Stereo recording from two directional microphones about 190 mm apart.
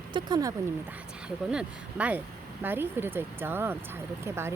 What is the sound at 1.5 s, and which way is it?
Speech, 5° right (ahead or behind).